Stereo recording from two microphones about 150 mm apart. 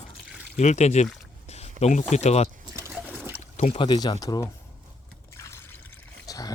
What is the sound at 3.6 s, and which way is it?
Speech, 45° left (ahead or behind).